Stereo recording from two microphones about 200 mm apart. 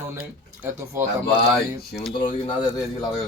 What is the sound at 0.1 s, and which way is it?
Speech, 10° right (ahead or behind).